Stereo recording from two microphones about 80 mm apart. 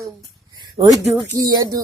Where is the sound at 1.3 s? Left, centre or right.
Right.